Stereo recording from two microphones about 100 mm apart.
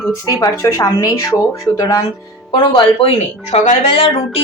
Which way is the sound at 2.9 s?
80° left.